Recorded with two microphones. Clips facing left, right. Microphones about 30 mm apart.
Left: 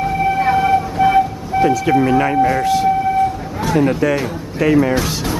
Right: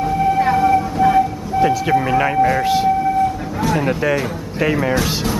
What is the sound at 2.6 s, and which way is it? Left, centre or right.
Speech, centre.